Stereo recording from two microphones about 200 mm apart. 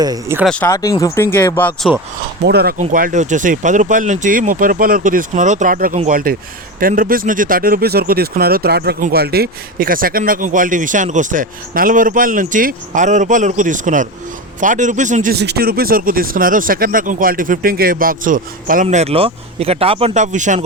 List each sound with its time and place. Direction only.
0.0 s speech: 20° right (ahead or behind)
0.3 s speech: 5° left (ahead or behind)
0.7 s speech: 15° left (ahead or behind)
2.5 s speech: 50° right (ahead or behind)